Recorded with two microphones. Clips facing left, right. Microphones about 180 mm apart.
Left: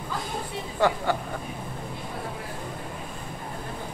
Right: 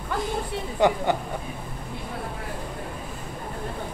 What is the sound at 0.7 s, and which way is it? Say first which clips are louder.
Speech: right 2 dB; 20° right (ahead or behind).